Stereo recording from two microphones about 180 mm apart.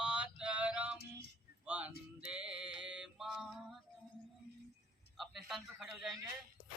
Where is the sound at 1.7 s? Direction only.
10° right (ahead or behind).